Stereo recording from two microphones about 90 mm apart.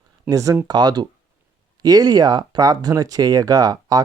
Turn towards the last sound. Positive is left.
turn(degrees=-45)  # may be behind; listen again after turning